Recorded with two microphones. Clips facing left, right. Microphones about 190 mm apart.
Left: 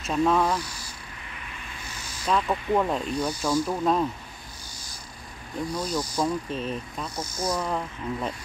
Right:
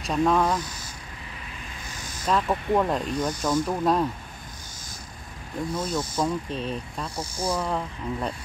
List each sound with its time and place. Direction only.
0.0 s speech: centre (ahead or behind)
2.2 s speech: centre (ahead or behind)
5.8 s speech: centre (ahead or behind)